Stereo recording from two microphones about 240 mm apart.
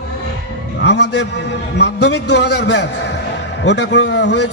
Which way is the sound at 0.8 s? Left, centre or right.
Left.